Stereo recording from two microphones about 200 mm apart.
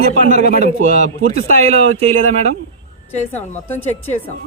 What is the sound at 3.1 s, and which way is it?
Speech, 35° left (ahead or behind).